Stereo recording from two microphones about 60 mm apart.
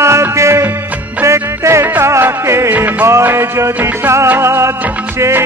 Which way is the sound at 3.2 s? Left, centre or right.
Right.